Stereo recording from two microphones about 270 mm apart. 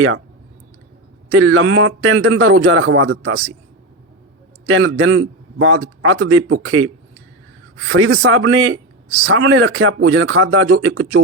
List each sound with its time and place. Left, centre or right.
1.3 s a man's voice: right
4.7 s a man's voice: right